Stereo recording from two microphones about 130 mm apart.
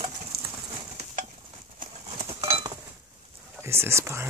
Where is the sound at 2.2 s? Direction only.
45° right (ahead or behind).